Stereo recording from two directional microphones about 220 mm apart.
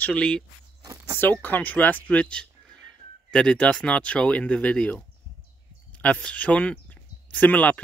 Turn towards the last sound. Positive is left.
turn(degrees=5)  # may be behind; listen again after turning